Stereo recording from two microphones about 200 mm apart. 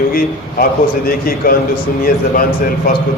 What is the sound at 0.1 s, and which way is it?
A man's voice, 45° left (ahead or behind).